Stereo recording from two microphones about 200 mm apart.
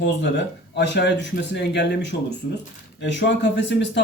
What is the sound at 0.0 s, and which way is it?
Speech, 60° left (ahead or behind).